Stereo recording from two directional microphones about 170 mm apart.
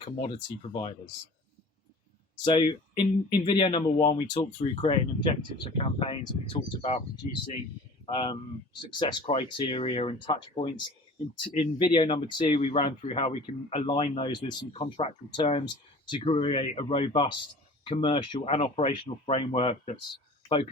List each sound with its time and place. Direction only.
0.0 s speech: 30° left (ahead or behind)
2.4 s speech: 25° left (ahead or behind)
8.0 s speech: 30° left (ahead or behind)